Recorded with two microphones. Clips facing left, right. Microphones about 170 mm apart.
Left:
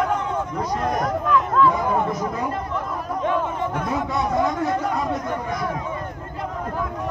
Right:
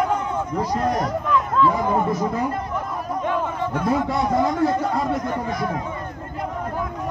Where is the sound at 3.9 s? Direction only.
30° right (ahead or behind).